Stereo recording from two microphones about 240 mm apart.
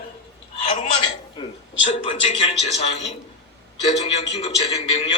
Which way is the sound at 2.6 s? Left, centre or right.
Left.